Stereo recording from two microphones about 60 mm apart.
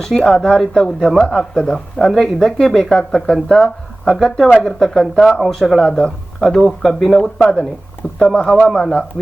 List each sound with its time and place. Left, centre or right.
0.3 s speech: centre